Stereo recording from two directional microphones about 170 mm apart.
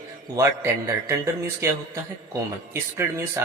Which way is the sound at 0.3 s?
15° right (ahead or behind).